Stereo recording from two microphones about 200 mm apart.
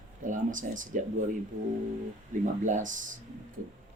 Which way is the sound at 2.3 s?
40° right (ahead or behind).